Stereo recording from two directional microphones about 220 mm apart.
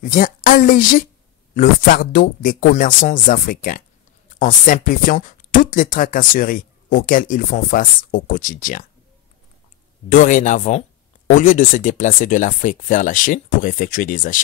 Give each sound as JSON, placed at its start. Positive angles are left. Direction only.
{"t": 0.0, "sound": "speech", "side_deg": 35}
{"t": 10.1, "sound": "speech", "side_deg": 35}